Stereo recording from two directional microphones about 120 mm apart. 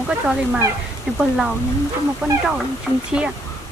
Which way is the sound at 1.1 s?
5° right (ahead or behind).